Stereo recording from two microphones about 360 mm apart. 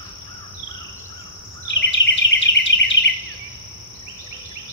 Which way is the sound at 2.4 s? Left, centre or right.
Left.